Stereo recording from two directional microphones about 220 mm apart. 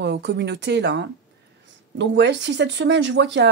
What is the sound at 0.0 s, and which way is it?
Speech, 50° right (ahead or behind).